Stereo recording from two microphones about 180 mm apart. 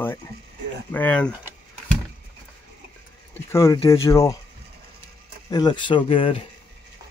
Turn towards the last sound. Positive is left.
turn(degrees=30)  # may be behind; listen again after turning